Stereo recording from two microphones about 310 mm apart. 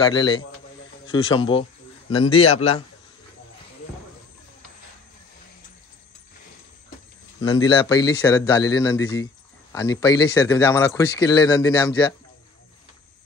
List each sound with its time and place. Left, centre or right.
0.0 s a man's voice: centre
7.4 s speech: centre